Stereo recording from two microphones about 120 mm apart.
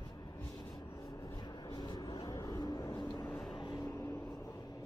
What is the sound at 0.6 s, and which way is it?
Vehicle, 25° left (ahead or behind).